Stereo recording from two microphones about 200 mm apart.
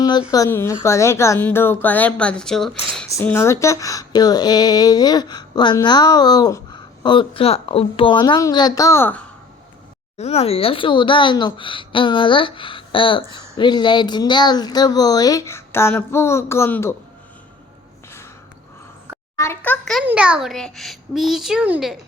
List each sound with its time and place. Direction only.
0.3 s speech: 15° left (ahead or behind)
3.1 s a woman's voice: 15° left (ahead or behind)
10.2 s a woman's voice: 30° left (ahead or behind); by 16.9 s 10° left (ahead or behind)
19.4 s speech: 10° left (ahead or behind)
20.1 s a child's voice: 5° right (ahead or behind)